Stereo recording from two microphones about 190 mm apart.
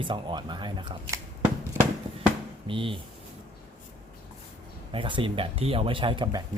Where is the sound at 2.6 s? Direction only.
25° right (ahead or behind).